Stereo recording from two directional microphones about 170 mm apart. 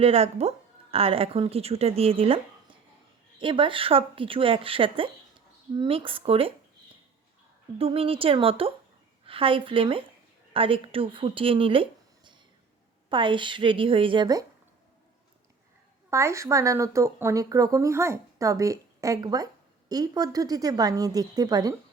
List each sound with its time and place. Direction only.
0.0 s speech: 35° right (ahead or behind)
7.8 s speech: 35° right (ahead or behind)
16.0 s speech: 15° right (ahead or behind)